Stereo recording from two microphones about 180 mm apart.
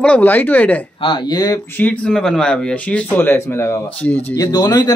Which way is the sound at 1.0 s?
25° left (ahead or behind).